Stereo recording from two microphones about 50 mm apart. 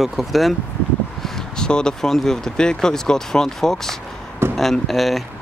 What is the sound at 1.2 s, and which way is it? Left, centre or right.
Speech, centre.